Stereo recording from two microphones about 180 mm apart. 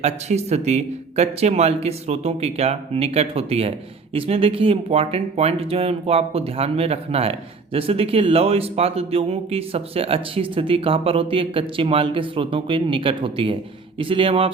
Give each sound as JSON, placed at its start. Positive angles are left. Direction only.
{"t": 0.0, "sound": "speech", "side_deg": -40}